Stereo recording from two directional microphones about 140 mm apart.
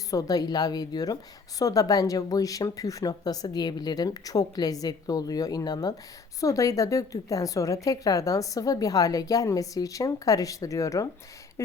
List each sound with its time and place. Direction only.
0.1 s speech: 25° left (ahead or behind)